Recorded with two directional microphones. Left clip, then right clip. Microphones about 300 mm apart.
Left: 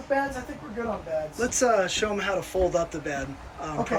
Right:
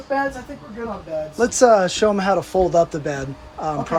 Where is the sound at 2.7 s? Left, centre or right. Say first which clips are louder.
Right 10 dB; right.